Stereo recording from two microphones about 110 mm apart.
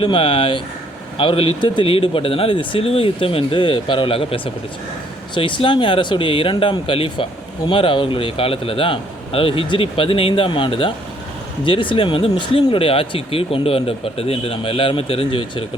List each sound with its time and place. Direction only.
0.0 s speech: 55° left (ahead or behind)